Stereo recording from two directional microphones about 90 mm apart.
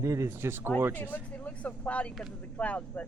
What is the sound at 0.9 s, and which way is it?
Speech, 20° left (ahead or behind).